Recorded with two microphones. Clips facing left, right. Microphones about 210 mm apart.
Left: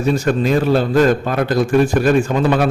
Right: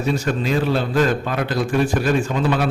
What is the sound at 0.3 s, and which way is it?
A man's voice, 45° left (ahead or behind).